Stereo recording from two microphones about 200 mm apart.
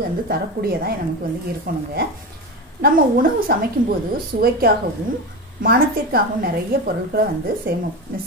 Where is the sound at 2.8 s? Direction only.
45° right (ahead or behind).